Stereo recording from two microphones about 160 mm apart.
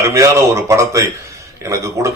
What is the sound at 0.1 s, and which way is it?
Speech, 20° right (ahead or behind).